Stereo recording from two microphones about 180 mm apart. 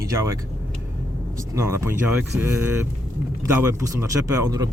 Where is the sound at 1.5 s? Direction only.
15° right (ahead or behind).